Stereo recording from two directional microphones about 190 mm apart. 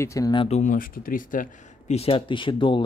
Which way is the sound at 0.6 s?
45° left (ahead or behind).